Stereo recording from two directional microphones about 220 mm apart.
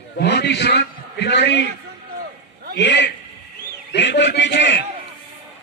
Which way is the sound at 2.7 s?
50° left (ahead or behind).